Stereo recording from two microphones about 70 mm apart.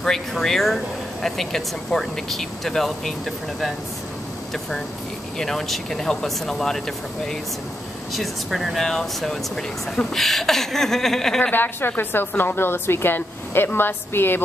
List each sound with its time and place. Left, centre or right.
0.0 s speech: centre
5.4 s speech: centre
8.1 s speech: centre
11.5 s a woman's voice: left